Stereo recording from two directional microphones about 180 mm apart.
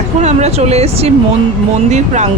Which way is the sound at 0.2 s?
40° right (ahead or behind).